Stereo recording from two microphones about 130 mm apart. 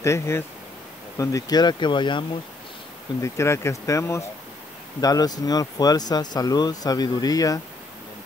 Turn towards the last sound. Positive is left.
turn(degrees=30)  # may be behind; listen again after turning